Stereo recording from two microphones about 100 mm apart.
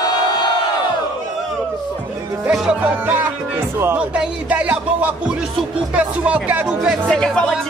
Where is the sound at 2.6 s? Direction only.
10° right (ahead or behind).